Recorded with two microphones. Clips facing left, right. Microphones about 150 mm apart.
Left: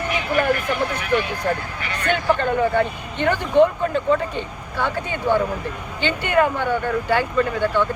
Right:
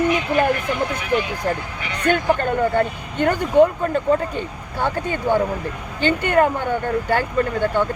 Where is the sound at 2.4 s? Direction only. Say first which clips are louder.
Even; 45° right (ahead or behind).